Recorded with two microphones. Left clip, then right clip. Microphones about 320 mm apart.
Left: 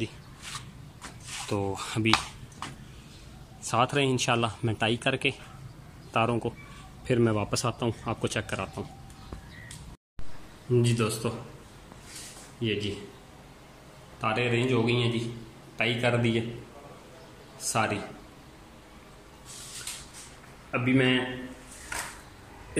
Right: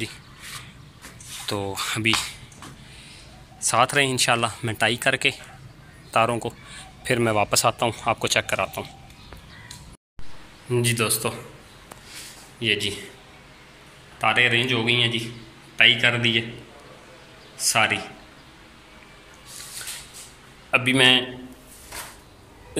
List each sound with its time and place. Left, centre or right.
1.5 s speech: centre
3.6 s speech: centre
10.8 s speech: centre
12.5 s a man's voice: centre
14.2 s speech: centre
17.6 s speech: centre
20.7 s speech: centre